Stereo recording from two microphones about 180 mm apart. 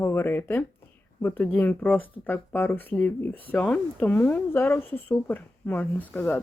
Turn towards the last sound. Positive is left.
turn(degrees=10)  # may be behind; listen again after turning